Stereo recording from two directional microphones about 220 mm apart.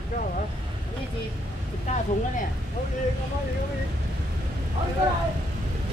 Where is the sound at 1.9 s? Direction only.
30° left (ahead or behind).